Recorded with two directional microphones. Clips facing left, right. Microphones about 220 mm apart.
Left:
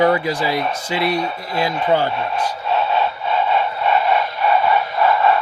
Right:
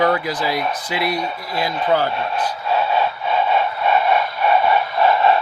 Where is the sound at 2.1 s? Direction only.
5° right (ahead or behind).